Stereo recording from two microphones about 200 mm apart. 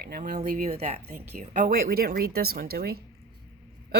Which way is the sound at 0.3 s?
35° right (ahead or behind).